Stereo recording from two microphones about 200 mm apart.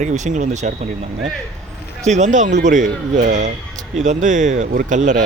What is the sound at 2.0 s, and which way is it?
Speech, 35° right (ahead or behind).